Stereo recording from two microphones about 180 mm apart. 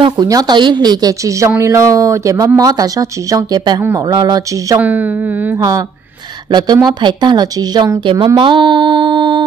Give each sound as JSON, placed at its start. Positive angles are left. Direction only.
{"t": 0.0, "sound": "a woman's voice", "side_deg": -20}
{"t": 4.7, "sound": "speech", "side_deg": -10}
{"t": 5.6, "sound": "a woman's voice", "side_deg": -20}